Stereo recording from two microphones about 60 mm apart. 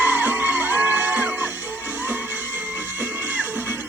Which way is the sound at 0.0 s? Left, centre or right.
Right.